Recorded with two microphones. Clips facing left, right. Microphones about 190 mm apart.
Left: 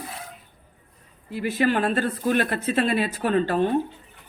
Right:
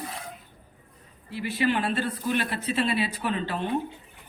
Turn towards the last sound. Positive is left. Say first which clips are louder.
# left 8 dB
turn(degrees=45)  # may be behind; listen again after turning